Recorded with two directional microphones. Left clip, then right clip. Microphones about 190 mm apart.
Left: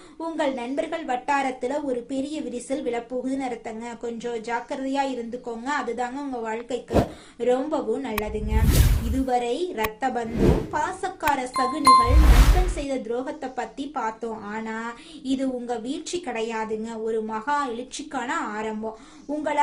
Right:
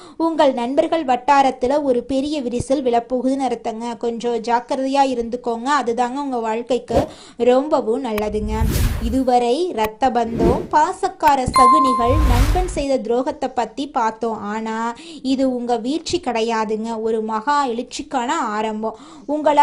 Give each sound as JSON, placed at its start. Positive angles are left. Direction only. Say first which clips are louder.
{"t": 0.2, "sound": "speech", "louder": "right 10 dB", "side_deg": -40}
{"t": 10.3, "sound": "speech", "louder": "right 5 dB", "side_deg": 0}
{"t": 10.7, "sound": "speech", "louder": "right 10 dB", "side_deg": -35}
{"t": 11.6, "sound": "speech", "louder": "right 3 dB", "side_deg": 0}
{"t": 12.7, "sound": "speech", "louder": "right 9 dB", "side_deg": -35}